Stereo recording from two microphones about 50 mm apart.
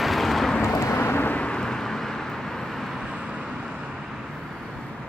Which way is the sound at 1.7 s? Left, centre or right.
Centre.